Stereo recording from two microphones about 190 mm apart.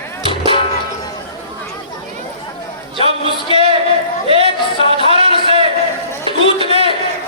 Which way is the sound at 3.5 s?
30° right (ahead or behind).